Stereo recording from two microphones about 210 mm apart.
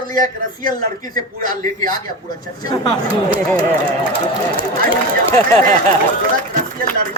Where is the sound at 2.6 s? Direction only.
20° left (ahead or behind).